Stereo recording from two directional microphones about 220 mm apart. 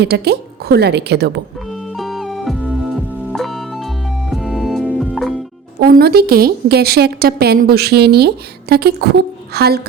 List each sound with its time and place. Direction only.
0.0 s a woman's voice: 45° right (ahead or behind)
2.0 s music: centre (ahead or behind)
5.8 s a woman's voice: 45° right (ahead or behind)